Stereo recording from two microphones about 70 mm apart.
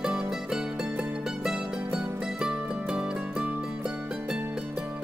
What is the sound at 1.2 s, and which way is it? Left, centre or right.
Music, centre.